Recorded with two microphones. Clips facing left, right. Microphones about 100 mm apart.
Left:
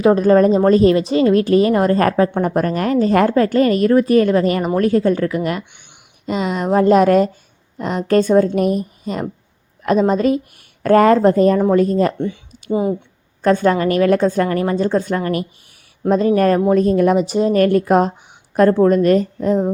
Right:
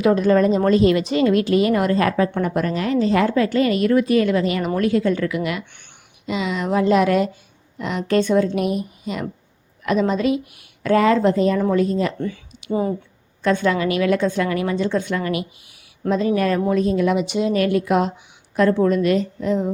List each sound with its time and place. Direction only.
0.0 s speech: 35° left (ahead or behind)
12.7 s speech: 20° left (ahead or behind)
13.4 s speech: 40° left (ahead or behind)